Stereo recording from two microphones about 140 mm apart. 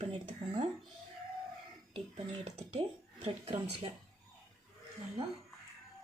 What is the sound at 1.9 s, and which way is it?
Speech, 50° right (ahead or behind).